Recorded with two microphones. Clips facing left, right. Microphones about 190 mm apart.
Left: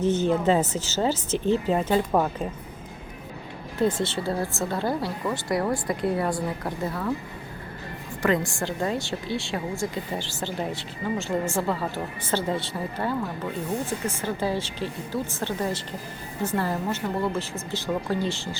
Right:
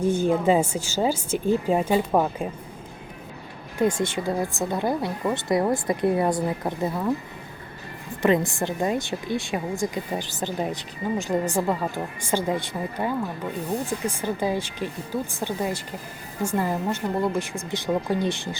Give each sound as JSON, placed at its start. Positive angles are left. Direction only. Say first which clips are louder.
{"t": 0.0, "sound": "speech", "louder": "right 1 dB", "side_deg": -10}
{"t": 3.8, "sound": "speech", "louder": "right 1 dB", "side_deg": -15}
{"t": 8.2, "sound": "speech", "louder": "right 3 dB", "side_deg": -20}
{"t": 14.2, "sound": "speech", "louder": "right 2 dB", "side_deg": -15}